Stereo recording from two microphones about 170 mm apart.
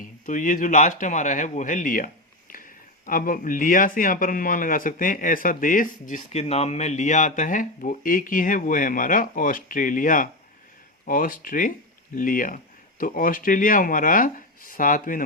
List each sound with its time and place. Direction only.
0.0 s speech: 50° left (ahead or behind)